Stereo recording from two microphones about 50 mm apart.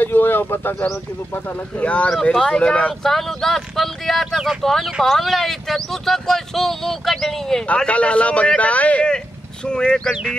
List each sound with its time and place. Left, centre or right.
0.0 s bird: left
1.8 s speech: left
2.3 s speech: centre
3.0 s speech: centre
7.6 s speech: left
9.7 s speech: centre